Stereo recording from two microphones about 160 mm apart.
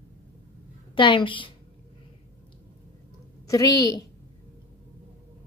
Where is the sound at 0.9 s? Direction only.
30° left (ahead or behind).